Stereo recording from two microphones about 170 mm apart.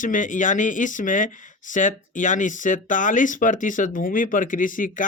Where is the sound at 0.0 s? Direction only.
50° left (ahead or behind).